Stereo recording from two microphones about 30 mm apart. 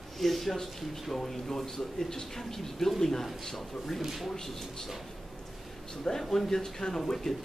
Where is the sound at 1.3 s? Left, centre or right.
Centre.